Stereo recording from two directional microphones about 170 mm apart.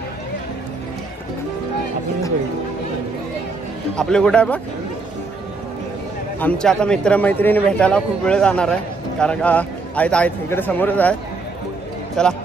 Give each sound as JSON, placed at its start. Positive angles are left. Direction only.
{"t": 3.9, "sound": "speech", "side_deg": 5}
{"t": 6.4, "sound": "a man's voice", "side_deg": 5}
{"t": 12.2, "sound": "speech", "side_deg": 5}